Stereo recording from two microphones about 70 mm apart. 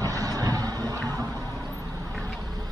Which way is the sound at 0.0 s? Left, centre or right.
Right.